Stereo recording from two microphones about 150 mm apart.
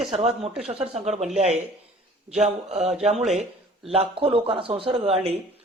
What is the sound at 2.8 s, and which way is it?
Speech, centre (ahead or behind).